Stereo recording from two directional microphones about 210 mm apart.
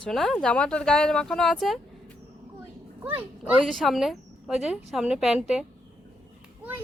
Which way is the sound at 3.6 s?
Centre (ahead or behind).